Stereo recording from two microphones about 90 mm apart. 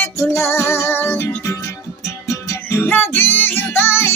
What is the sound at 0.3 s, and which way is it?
Music, 30° left (ahead or behind).